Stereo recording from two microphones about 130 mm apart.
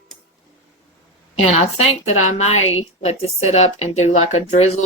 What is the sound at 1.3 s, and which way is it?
A woman's voice, 55° left (ahead or behind).